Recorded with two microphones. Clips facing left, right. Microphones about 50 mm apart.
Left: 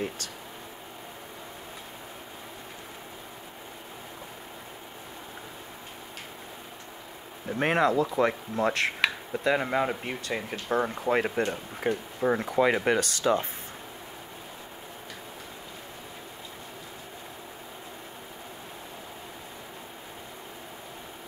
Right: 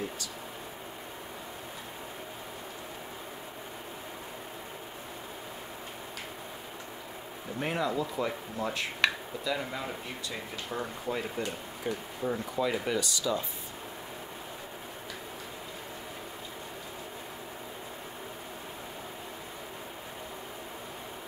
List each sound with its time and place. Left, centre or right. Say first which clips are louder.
7.5 s speech: left 7 dB; left
9.4 s speech: left 9 dB; left